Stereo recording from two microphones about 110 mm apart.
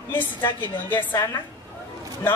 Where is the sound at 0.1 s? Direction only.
20° left (ahead or behind).